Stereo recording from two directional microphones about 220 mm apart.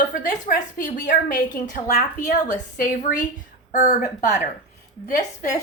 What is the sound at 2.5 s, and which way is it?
A woman's voice, 40° left (ahead or behind).